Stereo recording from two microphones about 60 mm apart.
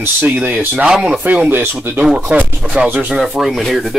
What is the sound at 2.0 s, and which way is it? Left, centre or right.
Speech, right.